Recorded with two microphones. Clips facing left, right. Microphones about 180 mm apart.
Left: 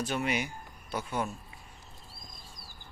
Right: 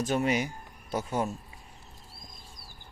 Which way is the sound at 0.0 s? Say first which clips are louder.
Right 4 dB; 45° right (ahead or behind).